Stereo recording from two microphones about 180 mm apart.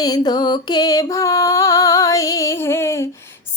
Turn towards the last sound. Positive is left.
turn(degrees=15)  # may be behind; listen again after turning